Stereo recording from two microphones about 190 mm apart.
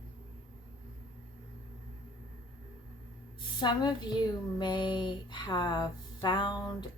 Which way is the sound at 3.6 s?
25° left (ahead or behind).